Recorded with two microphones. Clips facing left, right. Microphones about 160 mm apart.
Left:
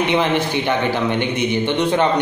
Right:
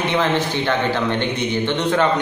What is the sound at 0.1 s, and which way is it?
A man's voice, 15° left (ahead or behind).